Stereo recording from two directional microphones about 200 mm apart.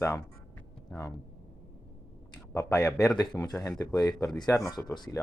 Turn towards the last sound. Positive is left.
turn(degrees=15)  # may be behind; listen again after turning